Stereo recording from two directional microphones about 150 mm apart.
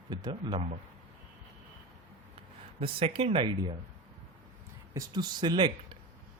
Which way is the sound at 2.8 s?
40° right (ahead or behind).